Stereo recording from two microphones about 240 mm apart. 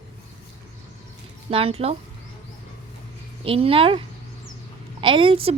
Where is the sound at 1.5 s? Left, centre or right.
Right.